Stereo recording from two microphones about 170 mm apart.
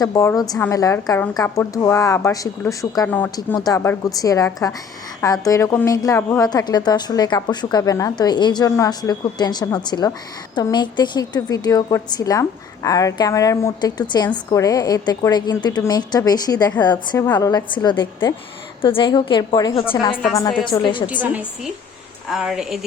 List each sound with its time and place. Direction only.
0.0 s a woman's voice: 20° left (ahead or behind)
22.3 s a woman's voice: centre (ahead or behind)